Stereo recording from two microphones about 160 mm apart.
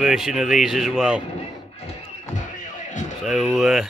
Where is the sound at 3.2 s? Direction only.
Centre (ahead or behind).